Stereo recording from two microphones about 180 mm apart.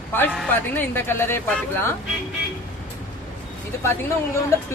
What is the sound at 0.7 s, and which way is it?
Speech, 10° left (ahead or behind).